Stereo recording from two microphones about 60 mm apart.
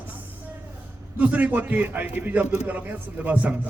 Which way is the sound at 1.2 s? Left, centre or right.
Right.